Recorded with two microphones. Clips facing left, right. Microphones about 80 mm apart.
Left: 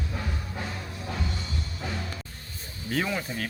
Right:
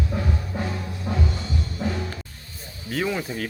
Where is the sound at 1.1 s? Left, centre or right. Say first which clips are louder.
Right 8 dB; right.